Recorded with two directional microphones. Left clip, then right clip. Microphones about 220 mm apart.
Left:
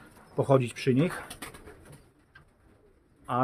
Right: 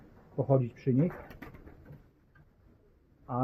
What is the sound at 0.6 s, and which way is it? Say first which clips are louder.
Speech: left 4 dB; 15° left (ahead or behind).